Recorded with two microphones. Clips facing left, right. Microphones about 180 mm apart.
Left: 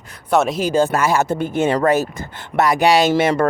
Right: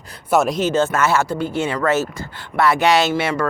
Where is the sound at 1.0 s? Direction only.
15° left (ahead or behind).